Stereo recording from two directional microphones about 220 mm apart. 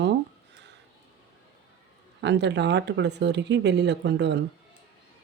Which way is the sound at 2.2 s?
50° right (ahead or behind).